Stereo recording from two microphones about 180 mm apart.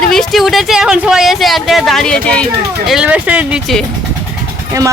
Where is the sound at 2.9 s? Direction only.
5° right (ahead or behind).